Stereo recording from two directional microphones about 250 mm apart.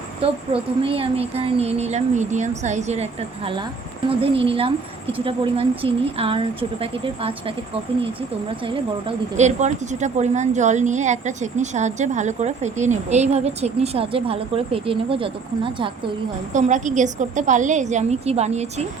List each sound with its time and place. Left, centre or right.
0.2 s a woman's voice: right
8.6 s a woman's voice: right